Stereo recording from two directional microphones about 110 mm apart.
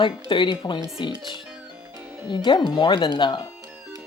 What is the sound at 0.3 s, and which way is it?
Speech, 45° left (ahead or behind).